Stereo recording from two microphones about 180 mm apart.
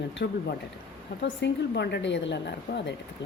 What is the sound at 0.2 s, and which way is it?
A woman's voice, 65° left (ahead or behind).